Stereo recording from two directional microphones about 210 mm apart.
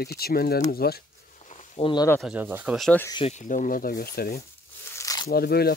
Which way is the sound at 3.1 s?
30° left (ahead or behind).